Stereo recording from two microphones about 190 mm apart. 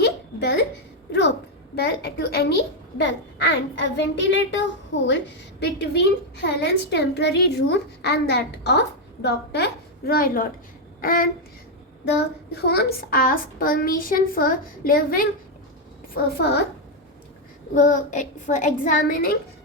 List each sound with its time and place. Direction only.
0.0 s a sound: 60° left (ahead or behind)
1.7 s a woman's voice: 60° left (ahead or behind)
11.0 s a sound: 50° left (ahead or behind)
12.0 s a child's voice: 60° left (ahead or behind)
16.1 s a woman's voice: 60° left (ahead or behind)
17.7 s a child's voice: 40° left (ahead or behind)